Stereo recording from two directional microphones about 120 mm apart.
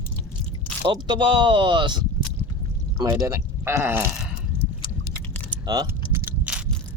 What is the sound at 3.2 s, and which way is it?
Speech, 20° right (ahead or behind).